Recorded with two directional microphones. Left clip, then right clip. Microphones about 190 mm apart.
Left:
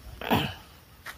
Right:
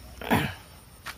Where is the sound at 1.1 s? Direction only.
15° left (ahead or behind).